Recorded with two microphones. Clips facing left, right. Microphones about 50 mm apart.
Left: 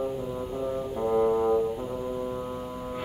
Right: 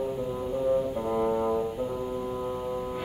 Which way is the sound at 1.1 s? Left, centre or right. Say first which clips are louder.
Left 6 dB; centre.